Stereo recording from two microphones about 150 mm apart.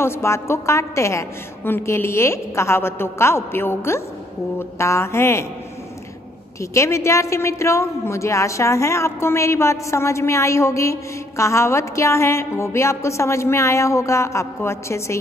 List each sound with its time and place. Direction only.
0.0 s a woman's voice: 15° left (ahead or behind)
6.6 s a woman's voice: 20° left (ahead or behind)